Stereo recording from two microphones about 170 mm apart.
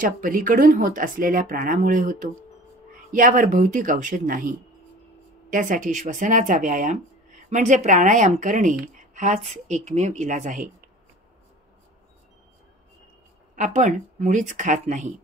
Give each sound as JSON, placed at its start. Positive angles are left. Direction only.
{"t": 0.0, "sound": "speech", "side_deg": -50}
{"t": 13.6, "sound": "speech", "side_deg": -45}